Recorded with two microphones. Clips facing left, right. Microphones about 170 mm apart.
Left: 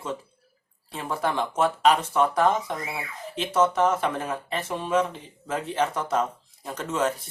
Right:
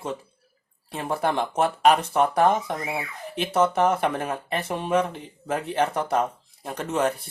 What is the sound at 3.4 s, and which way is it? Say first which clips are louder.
Speech: right 1 dB; 60° right (ahead or behind).